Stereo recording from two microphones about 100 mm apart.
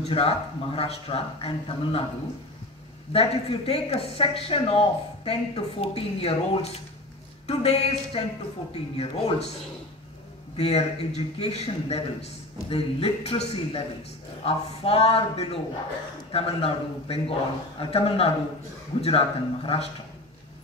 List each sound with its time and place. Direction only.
0.0 s speech: 80° left
3.1 s a man's voice: 75° left (ahead or behind)
10.5 s a man's voice: 90° left; by 19.9 s 75° left (ahead or behind)